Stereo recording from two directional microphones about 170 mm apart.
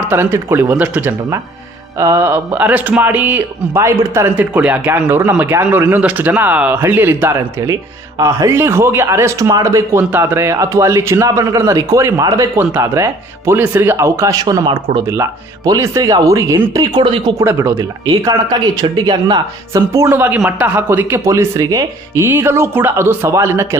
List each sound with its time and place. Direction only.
0.1 s speech: 15° right (ahead or behind)
17.4 s speech: 15° right (ahead or behind)